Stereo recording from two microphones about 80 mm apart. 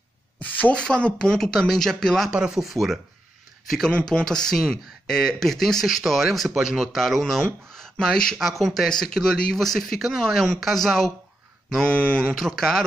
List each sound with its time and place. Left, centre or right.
0.4 s a sound: centre
0.8 s speech: centre
2.3 s speech: centre
3.9 s speech: centre
12.4 s speech: centre